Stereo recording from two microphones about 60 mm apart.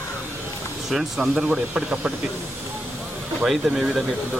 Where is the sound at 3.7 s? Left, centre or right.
Centre.